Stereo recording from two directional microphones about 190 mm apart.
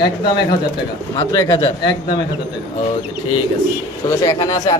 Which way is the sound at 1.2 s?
15° left (ahead or behind).